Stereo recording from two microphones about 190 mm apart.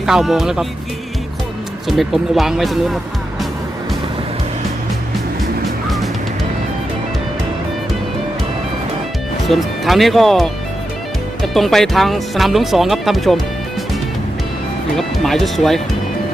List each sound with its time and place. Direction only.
0.0 s speech: centre (ahead or behind)
1.9 s speech: centre (ahead or behind)
9.5 s speech: centre (ahead or behind)
14.9 s speech: centre (ahead or behind)